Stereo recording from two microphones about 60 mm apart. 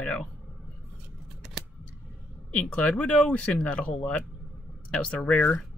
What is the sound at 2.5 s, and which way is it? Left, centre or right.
Speech, left.